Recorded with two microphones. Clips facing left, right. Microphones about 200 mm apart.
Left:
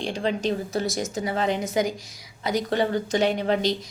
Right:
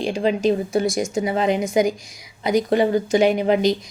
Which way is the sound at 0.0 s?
10° right (ahead or behind).